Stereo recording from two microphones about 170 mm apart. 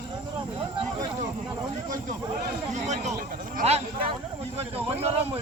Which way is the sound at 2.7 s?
45° right (ahead or behind).